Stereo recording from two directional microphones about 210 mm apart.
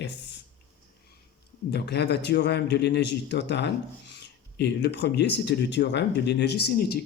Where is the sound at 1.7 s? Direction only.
50° left (ahead or behind).